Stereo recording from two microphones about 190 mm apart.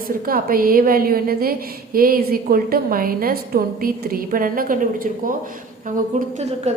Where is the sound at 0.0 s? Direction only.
50° right (ahead or behind).